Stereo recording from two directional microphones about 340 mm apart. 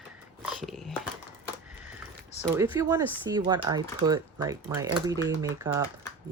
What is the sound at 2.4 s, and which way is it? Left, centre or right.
Speech, centre.